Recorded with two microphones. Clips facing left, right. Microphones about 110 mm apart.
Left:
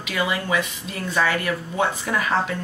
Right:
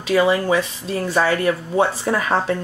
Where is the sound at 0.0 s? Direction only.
35° right (ahead or behind).